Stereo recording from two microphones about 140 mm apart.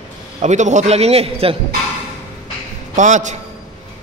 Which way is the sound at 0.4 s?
55° right (ahead or behind).